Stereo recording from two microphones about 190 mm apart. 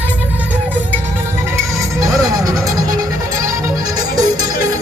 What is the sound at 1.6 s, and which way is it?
Music, 15° right (ahead or behind).